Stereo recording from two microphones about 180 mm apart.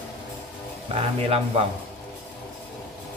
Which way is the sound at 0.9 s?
35° right (ahead or behind).